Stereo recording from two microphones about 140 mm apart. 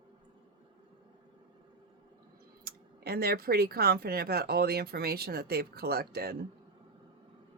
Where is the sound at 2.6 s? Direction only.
90° right.